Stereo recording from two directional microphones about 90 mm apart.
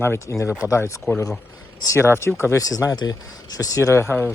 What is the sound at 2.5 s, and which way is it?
Speech, 40° left (ahead or behind).